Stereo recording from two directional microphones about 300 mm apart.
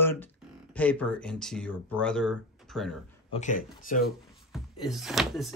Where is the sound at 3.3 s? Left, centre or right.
Left.